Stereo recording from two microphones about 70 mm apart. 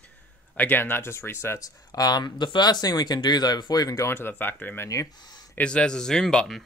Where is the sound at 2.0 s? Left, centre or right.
Left.